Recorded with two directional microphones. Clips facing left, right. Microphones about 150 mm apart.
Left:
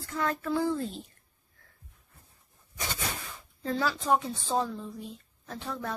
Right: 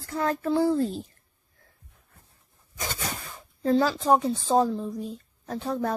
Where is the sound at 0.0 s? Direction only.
35° right (ahead or behind).